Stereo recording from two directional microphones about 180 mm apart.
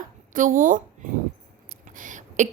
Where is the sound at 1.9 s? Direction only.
45° right (ahead or behind).